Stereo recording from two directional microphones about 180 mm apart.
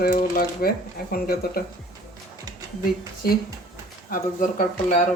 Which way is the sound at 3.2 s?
55° left (ahead or behind).